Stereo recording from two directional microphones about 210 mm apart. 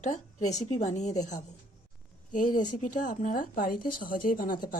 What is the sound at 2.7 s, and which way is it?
A woman's voice, 40° left (ahead or behind).